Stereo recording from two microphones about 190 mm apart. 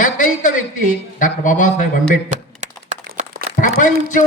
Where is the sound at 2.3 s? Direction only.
40° right (ahead or behind).